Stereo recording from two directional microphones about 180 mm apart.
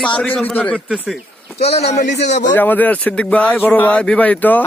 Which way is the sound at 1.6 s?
35° left (ahead or behind).